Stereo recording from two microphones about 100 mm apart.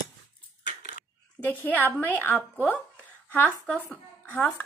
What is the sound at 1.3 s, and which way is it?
Speech, 15° left (ahead or behind).